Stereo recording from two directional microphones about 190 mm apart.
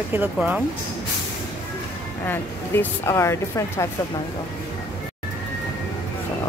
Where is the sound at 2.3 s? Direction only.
15° left (ahead or behind).